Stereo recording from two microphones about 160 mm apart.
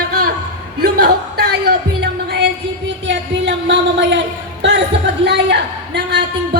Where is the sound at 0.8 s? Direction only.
80° right.